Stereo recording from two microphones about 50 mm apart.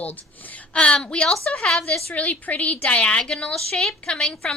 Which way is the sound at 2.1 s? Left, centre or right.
Left.